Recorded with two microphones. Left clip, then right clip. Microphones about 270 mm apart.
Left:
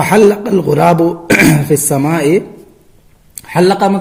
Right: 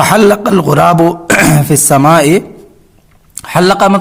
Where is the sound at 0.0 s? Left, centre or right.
Right.